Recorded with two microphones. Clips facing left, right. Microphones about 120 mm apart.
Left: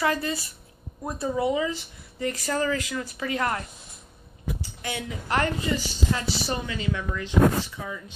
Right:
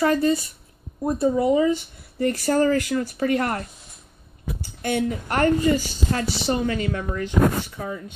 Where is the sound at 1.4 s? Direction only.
35° right (ahead or behind).